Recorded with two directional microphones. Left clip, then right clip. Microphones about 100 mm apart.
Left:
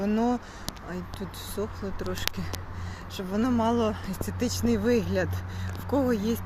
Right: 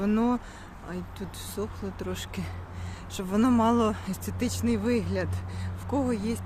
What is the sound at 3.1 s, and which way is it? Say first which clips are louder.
Speech: right 2 dB; 80° right.